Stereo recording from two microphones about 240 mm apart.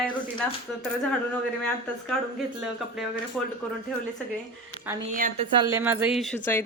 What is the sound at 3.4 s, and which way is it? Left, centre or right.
Speech, centre.